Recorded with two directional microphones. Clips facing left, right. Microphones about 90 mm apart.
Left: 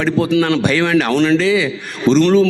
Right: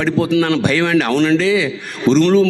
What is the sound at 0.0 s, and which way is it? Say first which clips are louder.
A man's voice: even; 20° left (ahead or behind).